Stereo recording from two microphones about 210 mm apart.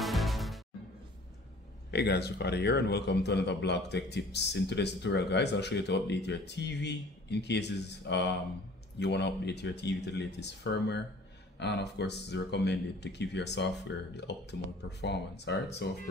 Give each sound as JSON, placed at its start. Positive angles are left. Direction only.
{"t": 0.0, "sound": "music", "side_deg": 0}
{"t": 1.9, "sound": "a man's voice", "side_deg": 50}